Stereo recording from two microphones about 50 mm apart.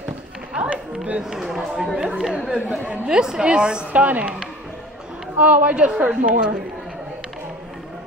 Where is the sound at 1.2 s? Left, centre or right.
Centre; by 4.3 s right.